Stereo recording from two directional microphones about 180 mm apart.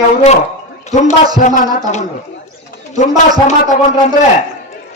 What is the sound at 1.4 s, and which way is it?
Music, 40° left (ahead or behind).